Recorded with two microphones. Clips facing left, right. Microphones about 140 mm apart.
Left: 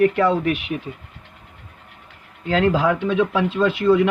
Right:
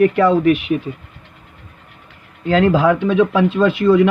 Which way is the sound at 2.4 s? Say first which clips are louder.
Right 5 dB; 85° right.